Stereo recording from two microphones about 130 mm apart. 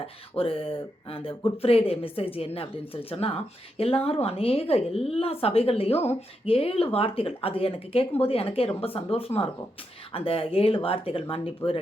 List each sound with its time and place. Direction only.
0.0 s a woman's voice: 45° left (ahead or behind)